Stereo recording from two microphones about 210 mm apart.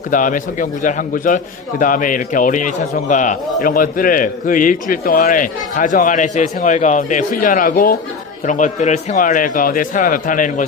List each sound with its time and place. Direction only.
0.1 s a man's voice: 40° left (ahead or behind)